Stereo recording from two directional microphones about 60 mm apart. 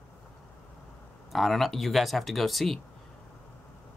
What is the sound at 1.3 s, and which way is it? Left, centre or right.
Speech, centre.